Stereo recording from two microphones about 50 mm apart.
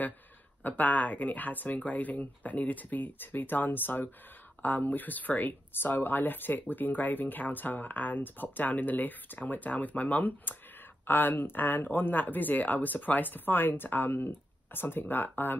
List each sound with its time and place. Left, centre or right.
0.7 s speech: left
11.1 s speech: left